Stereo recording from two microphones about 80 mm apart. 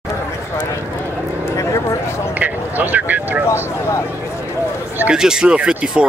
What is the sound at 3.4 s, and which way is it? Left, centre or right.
Speech, left.